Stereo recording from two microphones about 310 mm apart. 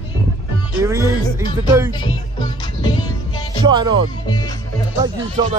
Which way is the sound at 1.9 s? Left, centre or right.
Centre.